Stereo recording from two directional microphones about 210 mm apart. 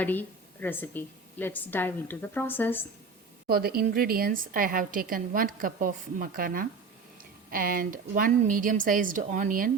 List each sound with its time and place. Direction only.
0.0 s a woman's voice: 10° left (ahead or behind)
3.4 s a woman's voice: 45° right (ahead or behind)